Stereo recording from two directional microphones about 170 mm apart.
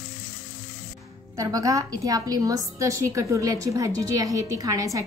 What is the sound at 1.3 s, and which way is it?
A woman's voice, 20° right (ahead or behind).